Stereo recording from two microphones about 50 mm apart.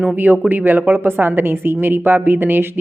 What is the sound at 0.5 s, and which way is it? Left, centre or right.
Speech, right.